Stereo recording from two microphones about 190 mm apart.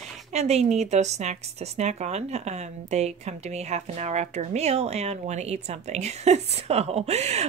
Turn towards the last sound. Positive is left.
turn(degrees=-35)  # may be behind; listen again after turning